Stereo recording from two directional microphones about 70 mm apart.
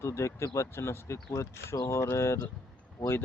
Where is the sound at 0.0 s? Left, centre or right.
Left.